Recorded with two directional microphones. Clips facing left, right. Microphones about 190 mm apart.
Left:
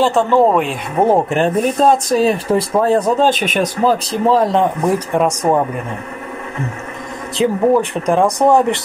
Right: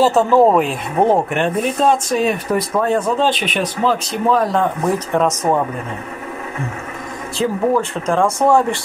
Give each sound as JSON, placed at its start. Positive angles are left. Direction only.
{"t": 0.0, "sound": "speech", "side_deg": -5}
{"t": 1.3, "sound": "speech", "side_deg": 40}
{"t": 4.9, "sound": "speech", "side_deg": 10}
{"t": 7.3, "sound": "speech", "side_deg": 15}